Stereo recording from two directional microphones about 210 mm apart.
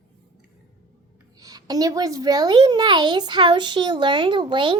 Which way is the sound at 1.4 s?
20° right (ahead or behind).